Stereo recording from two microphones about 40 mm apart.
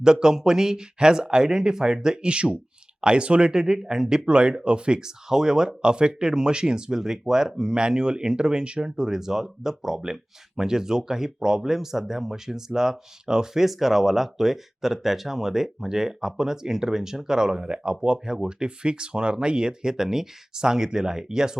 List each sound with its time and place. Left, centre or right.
0.0 s speech: centre
3.5 s speech: centre